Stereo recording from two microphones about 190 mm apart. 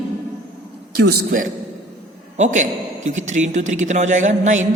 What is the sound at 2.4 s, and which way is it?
A man's voice, 40° right (ahead or behind).